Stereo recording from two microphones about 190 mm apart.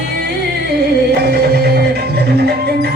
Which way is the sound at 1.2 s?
60° right (ahead or behind).